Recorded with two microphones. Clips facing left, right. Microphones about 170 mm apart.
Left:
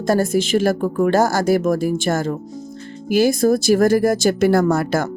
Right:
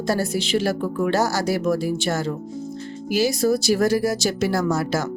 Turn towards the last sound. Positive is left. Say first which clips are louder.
# left 5 dB
turn(degrees=55)  # may be behind; listen again after turning